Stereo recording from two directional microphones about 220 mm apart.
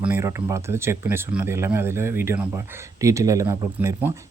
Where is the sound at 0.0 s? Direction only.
10° right (ahead or behind).